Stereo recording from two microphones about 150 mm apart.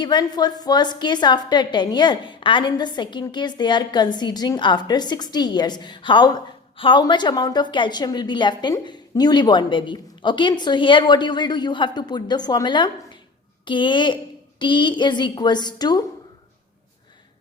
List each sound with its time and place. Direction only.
0.0 s a woman's voice: 30° left (ahead or behind)